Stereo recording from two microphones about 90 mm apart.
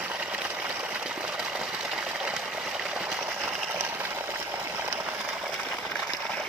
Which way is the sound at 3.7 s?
20° right (ahead or behind).